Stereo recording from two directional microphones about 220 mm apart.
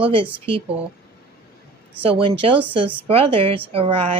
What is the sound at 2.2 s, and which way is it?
Speech, 25° right (ahead or behind).